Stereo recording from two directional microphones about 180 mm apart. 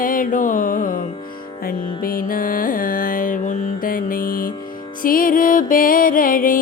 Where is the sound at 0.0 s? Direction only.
50° left (ahead or behind).